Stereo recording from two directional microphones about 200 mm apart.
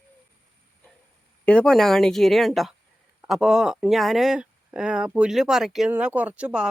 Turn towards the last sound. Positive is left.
turn(degrees=-5)  # may be behind; listen again after turning